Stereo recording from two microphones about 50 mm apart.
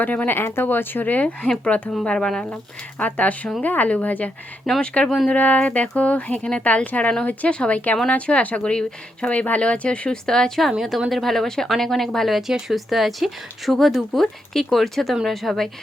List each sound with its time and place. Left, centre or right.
0.0 s speech: left
0.3 s speech: left; by 2.6 s centre
3.0 s speech: left
4.7 s a woman's voice: centre
5.3 s speech: left
10.2 s speech: centre
10.6 s a woman's voice: centre